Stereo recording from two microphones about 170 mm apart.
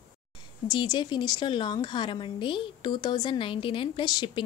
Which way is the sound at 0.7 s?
25° left (ahead or behind).